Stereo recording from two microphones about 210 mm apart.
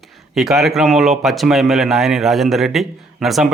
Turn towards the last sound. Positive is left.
turn(degrees=0)  # may be behind; listen again after turning